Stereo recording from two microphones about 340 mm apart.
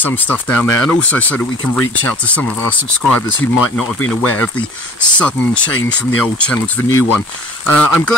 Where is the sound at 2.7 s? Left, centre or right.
Left.